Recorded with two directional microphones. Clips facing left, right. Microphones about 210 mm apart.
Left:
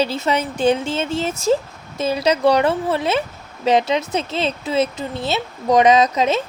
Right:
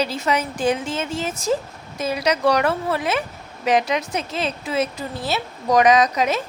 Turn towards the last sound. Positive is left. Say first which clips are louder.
# left 2 dB
turn(degrees=25)  # may be behind; listen again after turning